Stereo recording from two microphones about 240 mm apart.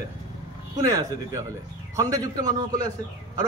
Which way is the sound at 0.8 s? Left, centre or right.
Centre.